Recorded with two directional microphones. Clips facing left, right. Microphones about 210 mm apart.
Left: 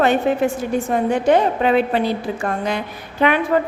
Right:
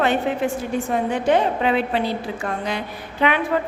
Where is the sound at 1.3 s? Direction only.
45° left (ahead or behind).